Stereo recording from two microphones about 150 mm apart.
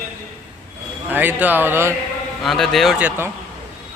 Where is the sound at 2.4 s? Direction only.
Centre (ahead or behind).